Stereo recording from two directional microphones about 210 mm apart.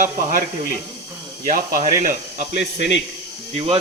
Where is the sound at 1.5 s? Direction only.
40° right (ahead or behind).